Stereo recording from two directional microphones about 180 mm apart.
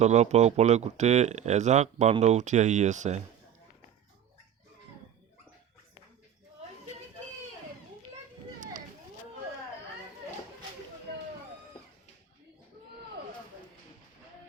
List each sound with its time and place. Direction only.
0.0 s speech: 40° right (ahead or behind)